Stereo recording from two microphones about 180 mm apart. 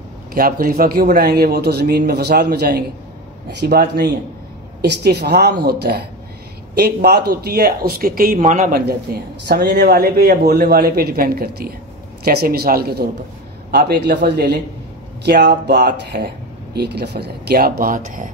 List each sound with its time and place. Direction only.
0.3 s speech: 55° right (ahead or behind)
8.8 s speech: 65° right (ahead or behind); by 18.3 s 50° right (ahead or behind)